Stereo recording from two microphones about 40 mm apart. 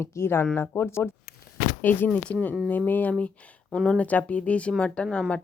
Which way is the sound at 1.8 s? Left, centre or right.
Left.